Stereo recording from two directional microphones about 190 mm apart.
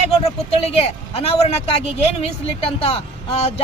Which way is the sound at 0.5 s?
30° left (ahead or behind).